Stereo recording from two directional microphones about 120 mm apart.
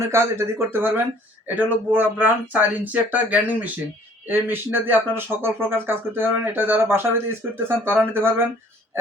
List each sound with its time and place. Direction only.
0.0 s speech: 20° right (ahead or behind)